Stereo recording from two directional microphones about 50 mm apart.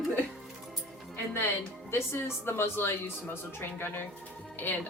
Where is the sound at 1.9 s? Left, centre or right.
Left.